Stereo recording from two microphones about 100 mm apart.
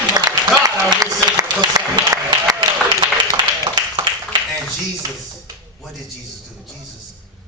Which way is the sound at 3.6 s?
50° right (ahead or behind).